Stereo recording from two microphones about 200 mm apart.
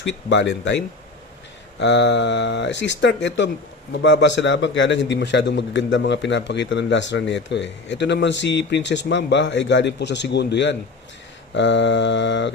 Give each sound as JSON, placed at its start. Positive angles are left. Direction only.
{"t": 0.3, "sound": "a man's voice", "side_deg": 60}
{"t": 1.8, "sound": "a man's voice", "side_deg": 60}